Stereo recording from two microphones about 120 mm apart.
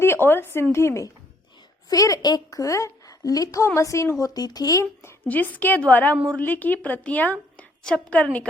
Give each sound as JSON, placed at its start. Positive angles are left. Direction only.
{"t": 0.0, "sound": "a woman's voice", "side_deg": 20}